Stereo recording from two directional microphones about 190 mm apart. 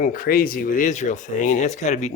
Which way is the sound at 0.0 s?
50° left (ahead or behind).